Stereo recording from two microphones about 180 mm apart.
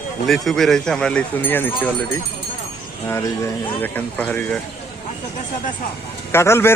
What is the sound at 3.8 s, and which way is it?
Speech, 10° left (ahead or behind).